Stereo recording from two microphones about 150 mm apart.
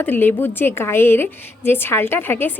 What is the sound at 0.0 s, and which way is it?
A woman's voice, 15° left (ahead or behind).